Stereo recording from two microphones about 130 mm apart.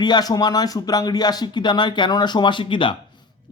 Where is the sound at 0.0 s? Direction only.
30° left (ahead or behind).